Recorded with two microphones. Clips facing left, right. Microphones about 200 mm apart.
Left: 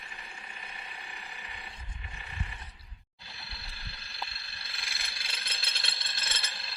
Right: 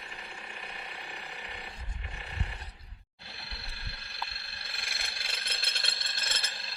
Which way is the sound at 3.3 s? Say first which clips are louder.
Right 2 dB; 60° right (ahead or behind).